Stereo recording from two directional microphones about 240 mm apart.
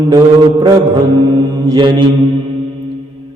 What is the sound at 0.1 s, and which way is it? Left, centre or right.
Mantra, centre.